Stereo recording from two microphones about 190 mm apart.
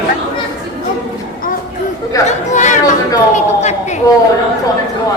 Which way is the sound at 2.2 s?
40° left (ahead or behind).